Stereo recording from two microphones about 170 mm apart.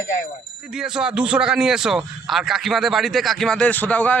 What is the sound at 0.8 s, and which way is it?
A man's voice, 5° right (ahead or behind).